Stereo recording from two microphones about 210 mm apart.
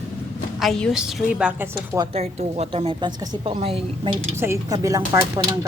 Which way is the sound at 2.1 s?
30° right (ahead or behind).